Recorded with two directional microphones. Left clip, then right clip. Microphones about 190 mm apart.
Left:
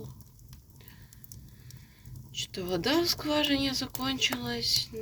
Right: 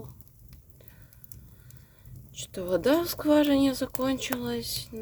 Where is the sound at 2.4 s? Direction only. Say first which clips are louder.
Right 5 dB; 50° right (ahead or behind).